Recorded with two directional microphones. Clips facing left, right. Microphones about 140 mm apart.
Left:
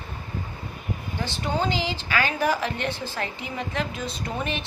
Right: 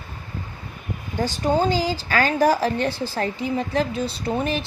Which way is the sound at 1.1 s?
40° right (ahead or behind).